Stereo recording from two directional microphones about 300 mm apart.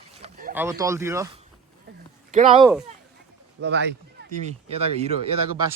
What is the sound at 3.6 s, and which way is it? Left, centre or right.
Speech, right.